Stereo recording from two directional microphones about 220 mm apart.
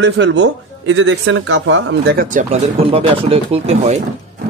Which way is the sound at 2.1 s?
35° right (ahead or behind).